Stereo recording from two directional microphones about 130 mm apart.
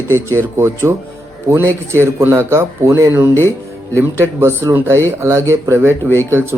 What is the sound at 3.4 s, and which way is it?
Music, 20° left (ahead or behind).